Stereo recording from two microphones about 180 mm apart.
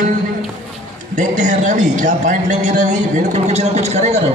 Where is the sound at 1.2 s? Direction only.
45° right (ahead or behind).